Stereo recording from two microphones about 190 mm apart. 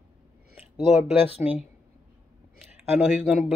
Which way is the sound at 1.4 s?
5° right (ahead or behind).